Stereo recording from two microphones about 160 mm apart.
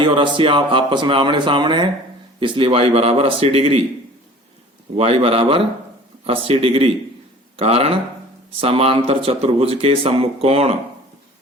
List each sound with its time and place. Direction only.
0.0 s speech: 30° right (ahead or behind)
4.9 s speech: 40° right (ahead or behind)